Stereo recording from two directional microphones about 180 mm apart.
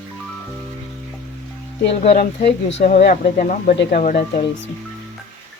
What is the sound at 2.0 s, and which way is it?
Speech, 40° left (ahead or behind).